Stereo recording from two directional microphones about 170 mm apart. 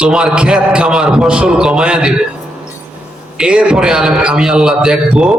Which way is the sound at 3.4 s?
5° right (ahead or behind).